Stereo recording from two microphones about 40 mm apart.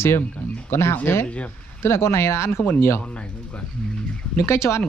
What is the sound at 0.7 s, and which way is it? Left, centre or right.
Speech, left.